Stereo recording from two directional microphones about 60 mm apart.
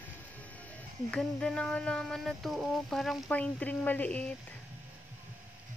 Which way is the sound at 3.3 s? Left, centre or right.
Left.